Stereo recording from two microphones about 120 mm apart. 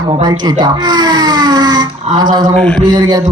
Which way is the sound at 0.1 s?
35° right (ahead or behind).